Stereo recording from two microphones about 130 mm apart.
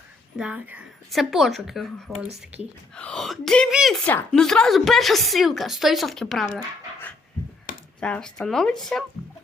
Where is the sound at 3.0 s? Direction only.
5° left (ahead or behind).